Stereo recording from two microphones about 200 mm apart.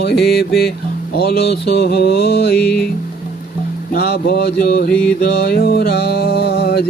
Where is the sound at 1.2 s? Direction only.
50° left (ahead or behind).